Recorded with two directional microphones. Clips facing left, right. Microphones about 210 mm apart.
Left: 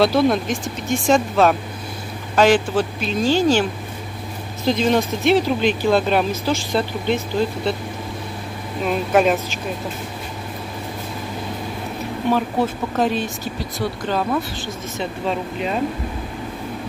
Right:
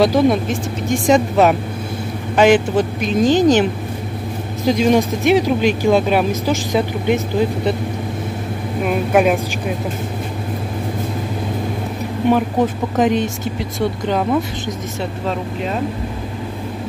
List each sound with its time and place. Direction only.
0.0 s speech: 15° right (ahead or behind)
2.7 s speech: 20° right (ahead or behind)
4.6 s speech: 15° right (ahead or behind)
8.8 s speech: 10° right (ahead or behind)
12.3 s speech: 15° right (ahead or behind)